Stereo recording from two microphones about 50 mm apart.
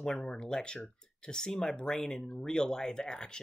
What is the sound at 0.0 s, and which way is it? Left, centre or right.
Speech, centre.